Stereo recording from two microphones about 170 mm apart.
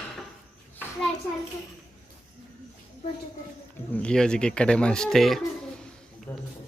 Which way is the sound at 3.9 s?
5° left (ahead or behind).